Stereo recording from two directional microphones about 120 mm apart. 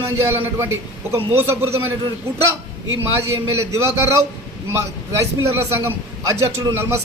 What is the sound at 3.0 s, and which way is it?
A man's voice, 20° right (ahead or behind).